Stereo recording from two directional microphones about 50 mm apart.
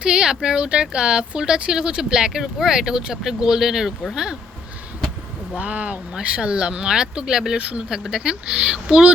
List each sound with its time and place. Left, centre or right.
0.0 s speech: centre
5.5 s speech: right